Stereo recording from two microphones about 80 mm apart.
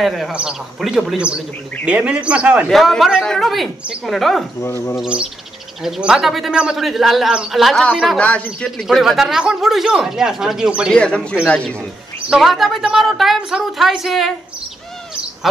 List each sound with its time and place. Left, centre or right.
0.0 s a woman's voice: centre
0.3 s speech: centre
2.7 s a woman's voice: centre
4.6 s speech: left
5.0 s a woman's voice: centre
6.5 s speech: centre
6.8 s a woman's voice: centre
8.2 s a man's voice: centre
8.6 s a woman's voice: centre
10.9 s a man's voice: centre
12.3 s a woman's voice: centre